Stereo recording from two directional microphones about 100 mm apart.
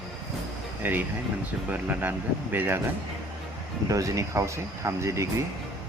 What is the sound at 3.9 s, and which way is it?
Speech, 35° right (ahead or behind).